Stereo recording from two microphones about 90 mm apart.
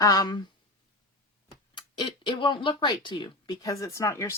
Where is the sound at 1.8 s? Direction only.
60° left (ahead or behind).